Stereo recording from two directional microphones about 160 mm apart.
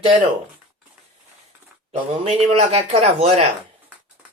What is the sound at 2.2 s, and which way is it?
Speech, 40° right (ahead or behind).